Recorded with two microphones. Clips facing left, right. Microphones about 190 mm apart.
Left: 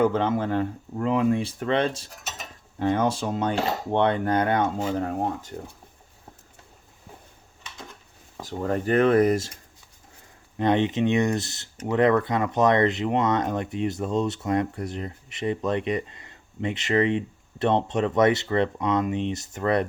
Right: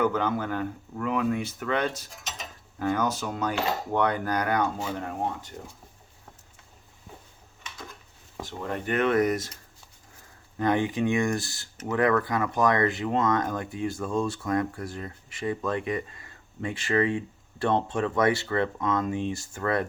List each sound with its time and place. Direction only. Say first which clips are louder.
0.0 s speech: left 4 dB; 30° left (ahead or behind)
4.8 s speech: left 5 dB; 40° left (ahead or behind)
8.4 s speech: left 6 dB; 40° left (ahead or behind)
10.6 s speech: left 3 dB; 20° left (ahead or behind)